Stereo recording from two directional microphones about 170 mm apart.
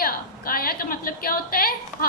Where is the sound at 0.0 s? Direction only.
60° left (ahead or behind).